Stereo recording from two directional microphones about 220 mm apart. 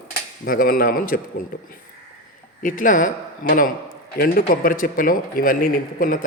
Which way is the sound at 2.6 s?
35° left (ahead or behind).